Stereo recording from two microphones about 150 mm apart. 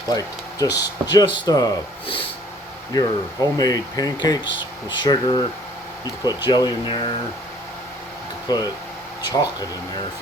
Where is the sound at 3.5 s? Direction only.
25° left (ahead or behind).